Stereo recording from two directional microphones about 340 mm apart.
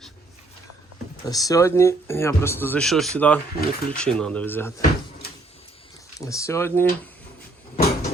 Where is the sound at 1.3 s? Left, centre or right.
Centre.